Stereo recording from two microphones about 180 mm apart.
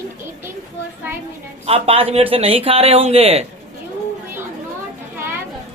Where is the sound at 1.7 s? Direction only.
30° right (ahead or behind).